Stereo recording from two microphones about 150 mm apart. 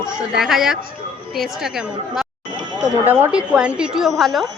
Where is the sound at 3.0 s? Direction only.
10° right (ahead or behind).